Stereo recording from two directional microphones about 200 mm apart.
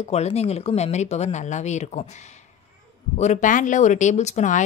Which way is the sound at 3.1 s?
35° left (ahead or behind).